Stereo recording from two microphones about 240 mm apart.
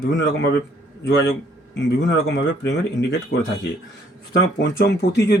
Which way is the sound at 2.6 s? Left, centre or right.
Left.